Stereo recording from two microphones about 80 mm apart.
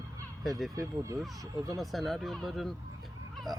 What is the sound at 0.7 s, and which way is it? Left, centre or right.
Speech, right.